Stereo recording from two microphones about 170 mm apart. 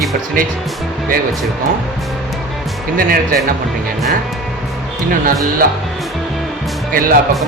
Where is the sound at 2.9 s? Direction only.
60° right (ahead or behind).